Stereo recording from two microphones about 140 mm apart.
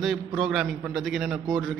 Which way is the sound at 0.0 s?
Centre (ahead or behind).